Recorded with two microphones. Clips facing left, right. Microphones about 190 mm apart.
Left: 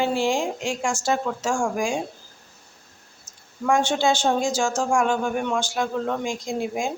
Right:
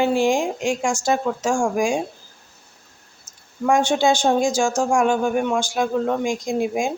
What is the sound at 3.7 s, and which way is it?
Speech, 15° right (ahead or behind).